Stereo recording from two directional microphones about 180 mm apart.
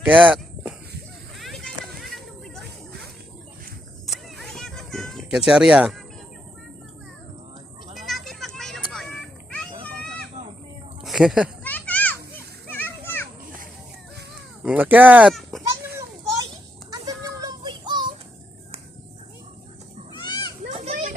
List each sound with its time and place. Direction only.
0.0 s a sound: 5° right (ahead or behind)
4.0 s music: centre (ahead or behind)
7.9 s a sound: centre (ahead or behind)
10.4 s a sound: 40° right (ahead or behind)
11.0 s speech: centre (ahead or behind)
11.6 s children playing: 10° left (ahead or behind)
14.6 s speech: 10° right (ahead or behind)
15.7 s children playing: 15° right (ahead or behind)
16.9 s child singing: 20° right (ahead or behind)
20.2 s children playing: 25° left (ahead or behind)
20.7 s children playing: 35° right (ahead or behind)